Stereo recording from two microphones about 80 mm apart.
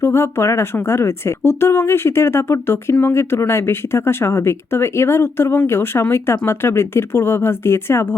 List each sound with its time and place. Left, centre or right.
0.0 s speech: left